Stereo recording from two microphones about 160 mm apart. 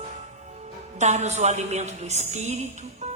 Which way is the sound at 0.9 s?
45° right (ahead or behind).